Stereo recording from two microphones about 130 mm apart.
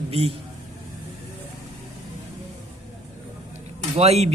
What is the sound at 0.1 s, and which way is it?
Speech, 50° right (ahead or behind).